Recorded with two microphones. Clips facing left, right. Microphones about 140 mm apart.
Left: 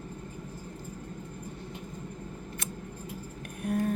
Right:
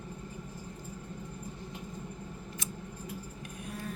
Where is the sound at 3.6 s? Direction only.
50° left (ahead or behind).